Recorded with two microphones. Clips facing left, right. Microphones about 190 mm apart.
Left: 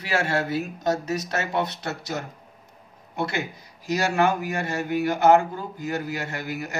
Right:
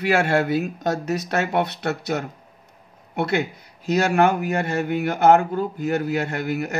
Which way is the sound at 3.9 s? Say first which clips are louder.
Right 4 dB; 60° right (ahead or behind).